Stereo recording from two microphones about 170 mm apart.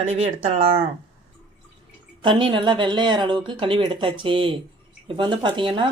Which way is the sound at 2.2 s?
30° right (ahead or behind).